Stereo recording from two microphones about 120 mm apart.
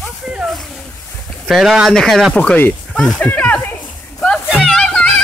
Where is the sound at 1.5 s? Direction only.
5° right (ahead or behind); by 3.6 s 10° left (ahead or behind).